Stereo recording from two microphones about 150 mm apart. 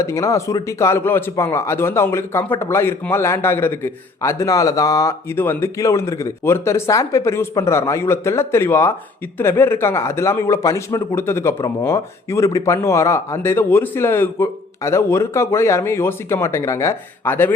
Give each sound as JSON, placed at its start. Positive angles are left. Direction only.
{"t": 0.0, "sound": "a man's voice", "side_deg": 20}